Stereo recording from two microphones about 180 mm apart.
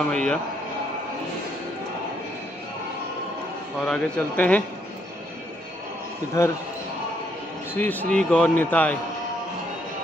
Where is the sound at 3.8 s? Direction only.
5° left (ahead or behind).